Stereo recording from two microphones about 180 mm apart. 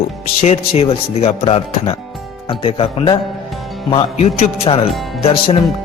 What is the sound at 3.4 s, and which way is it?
Music, centre (ahead or behind).